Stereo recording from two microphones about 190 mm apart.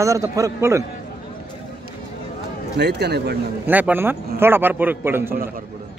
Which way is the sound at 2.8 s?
60° right (ahead or behind).